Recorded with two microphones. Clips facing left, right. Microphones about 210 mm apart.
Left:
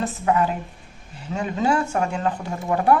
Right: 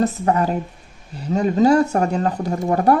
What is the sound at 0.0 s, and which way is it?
Speech, 40° right (ahead or behind).